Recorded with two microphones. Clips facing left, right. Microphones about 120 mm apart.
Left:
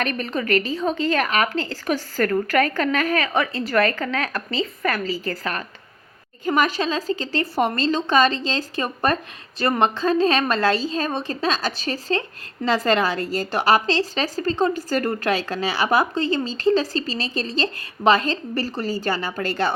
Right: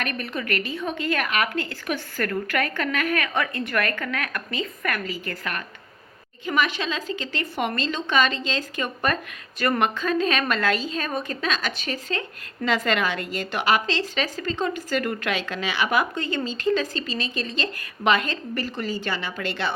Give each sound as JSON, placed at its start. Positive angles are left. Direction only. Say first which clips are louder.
{"t": 0.0, "sound": "a woman's voice", "louder": "left 5 dB", "side_deg": 40}